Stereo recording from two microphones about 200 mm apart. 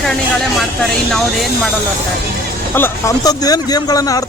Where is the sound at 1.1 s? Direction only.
Centre (ahead or behind).